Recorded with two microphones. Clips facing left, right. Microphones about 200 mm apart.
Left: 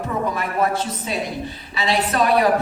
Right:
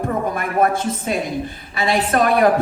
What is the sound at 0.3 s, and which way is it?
A woman's voice, 50° right (ahead or behind).